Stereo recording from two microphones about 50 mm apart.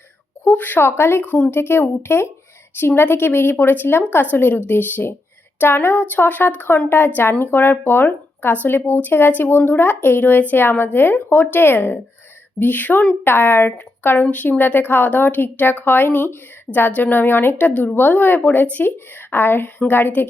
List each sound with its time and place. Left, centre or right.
0.5 s a woman's voice: left
6.1 s a woman's voice: left
17.6 s a woman's voice: left
18.9 s a woman's voice: left